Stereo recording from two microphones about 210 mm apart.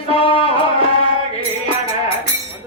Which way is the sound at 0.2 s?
25° left (ahead or behind).